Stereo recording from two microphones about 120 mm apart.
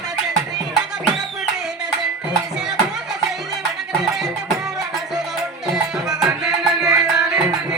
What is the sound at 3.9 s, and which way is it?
Music, 5° right (ahead or behind).